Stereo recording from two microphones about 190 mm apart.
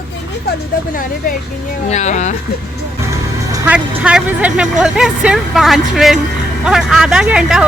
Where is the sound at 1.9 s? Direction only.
35° left (ahead or behind).